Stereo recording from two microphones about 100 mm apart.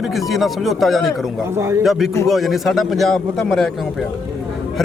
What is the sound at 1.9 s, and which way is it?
Speech, 5° right (ahead or behind).